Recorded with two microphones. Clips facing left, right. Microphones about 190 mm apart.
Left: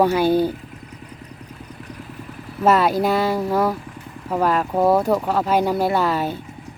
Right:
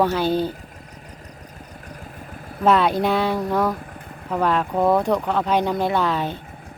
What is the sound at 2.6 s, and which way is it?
Speech, 5° left (ahead or behind).